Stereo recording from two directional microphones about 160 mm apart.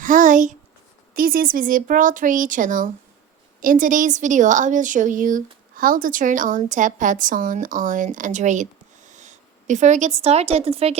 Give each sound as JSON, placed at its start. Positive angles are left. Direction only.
{"t": 0.0, "sound": "a child's voice", "side_deg": -55}
{"t": 1.1, "sound": "a woman's voice", "side_deg": -65}